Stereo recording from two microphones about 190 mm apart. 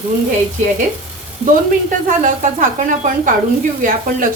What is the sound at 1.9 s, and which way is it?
A woman's voice, 45° right (ahead or behind).